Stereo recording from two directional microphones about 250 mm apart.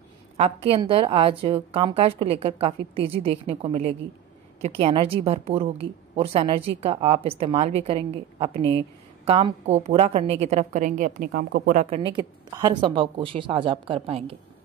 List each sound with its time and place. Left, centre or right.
0.4 s a woman's voice: right
11.8 s a woman's voice: right